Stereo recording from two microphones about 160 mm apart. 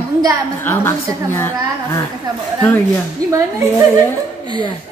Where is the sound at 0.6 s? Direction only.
15° left (ahead or behind).